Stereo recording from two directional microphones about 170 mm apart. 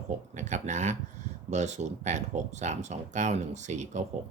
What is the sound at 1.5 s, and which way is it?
Speech, 45° right (ahead or behind).